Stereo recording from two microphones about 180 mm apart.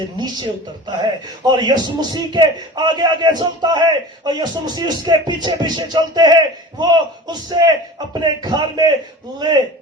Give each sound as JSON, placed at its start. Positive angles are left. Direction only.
{"t": 1.5, "sound": "a man's voice", "side_deg": -25}